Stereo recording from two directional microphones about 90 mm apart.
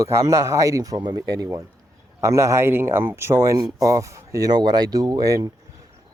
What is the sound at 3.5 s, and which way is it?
Speech, 40° right (ahead or behind).